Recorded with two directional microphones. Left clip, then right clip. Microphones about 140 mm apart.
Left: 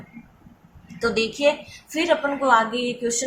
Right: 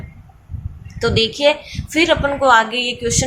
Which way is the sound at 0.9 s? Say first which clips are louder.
Right 6 dB; 20° right (ahead or behind).